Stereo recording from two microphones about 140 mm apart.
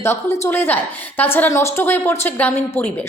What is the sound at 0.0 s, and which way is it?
A woman's voice, 20° left (ahead or behind).